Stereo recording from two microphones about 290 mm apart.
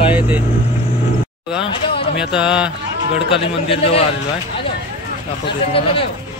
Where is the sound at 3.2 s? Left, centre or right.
Centre.